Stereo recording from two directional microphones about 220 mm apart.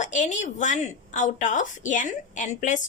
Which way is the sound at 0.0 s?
35° left (ahead or behind).